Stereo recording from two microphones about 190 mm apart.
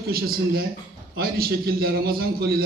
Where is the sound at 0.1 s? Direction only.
50° right (ahead or behind).